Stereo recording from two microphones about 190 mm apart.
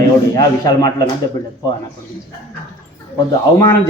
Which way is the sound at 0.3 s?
20° left (ahead or behind).